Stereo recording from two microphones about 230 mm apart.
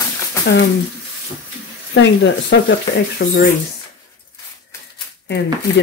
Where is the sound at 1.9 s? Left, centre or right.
Left.